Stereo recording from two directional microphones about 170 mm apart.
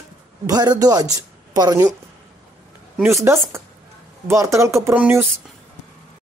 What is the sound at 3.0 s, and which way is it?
Speech, 15° right (ahead or behind).